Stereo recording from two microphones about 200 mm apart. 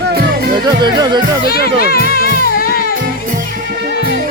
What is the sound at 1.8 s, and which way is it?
Music, 50° left (ahead or behind).